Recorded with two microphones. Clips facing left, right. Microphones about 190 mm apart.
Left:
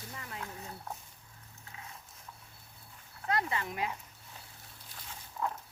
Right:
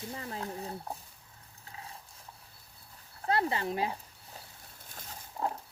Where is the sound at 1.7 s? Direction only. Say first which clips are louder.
Right 3 dB; 35° right (ahead or behind).